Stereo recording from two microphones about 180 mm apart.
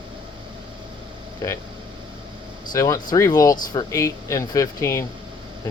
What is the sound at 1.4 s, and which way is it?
Speech, 20° left (ahead or behind).